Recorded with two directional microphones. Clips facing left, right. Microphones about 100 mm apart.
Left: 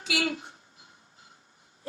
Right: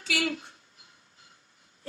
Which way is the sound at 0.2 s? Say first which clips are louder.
Left 1 dB; 30° left (ahead or behind).